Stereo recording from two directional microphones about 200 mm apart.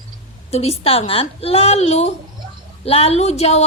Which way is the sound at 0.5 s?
30° left (ahead or behind).